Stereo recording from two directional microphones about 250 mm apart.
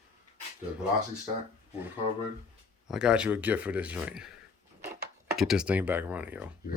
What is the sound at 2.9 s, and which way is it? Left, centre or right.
Speech, centre.